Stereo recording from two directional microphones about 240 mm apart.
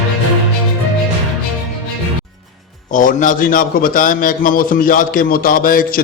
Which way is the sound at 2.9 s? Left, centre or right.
Left.